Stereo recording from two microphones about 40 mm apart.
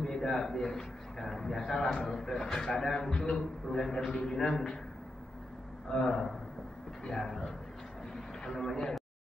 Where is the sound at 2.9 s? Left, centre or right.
Centre.